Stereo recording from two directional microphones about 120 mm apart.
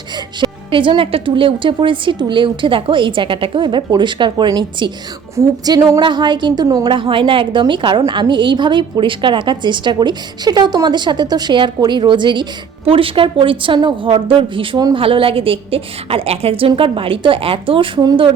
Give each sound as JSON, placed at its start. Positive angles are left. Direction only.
{"t": 0.3, "sound": "a woman's voice", "side_deg": -40}
{"t": 5.4, "sound": "speech", "side_deg": -25}
{"t": 6.0, "sound": "a woman's voice", "side_deg": -40}